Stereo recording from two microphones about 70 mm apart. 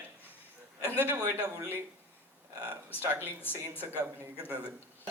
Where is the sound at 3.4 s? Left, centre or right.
Left.